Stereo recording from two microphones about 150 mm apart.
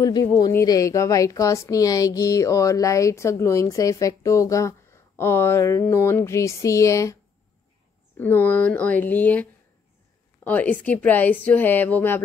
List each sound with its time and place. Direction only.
0.4 s a woman's voice: 20° left (ahead or behind)
8.2 s a woman's voice: 10° left (ahead or behind)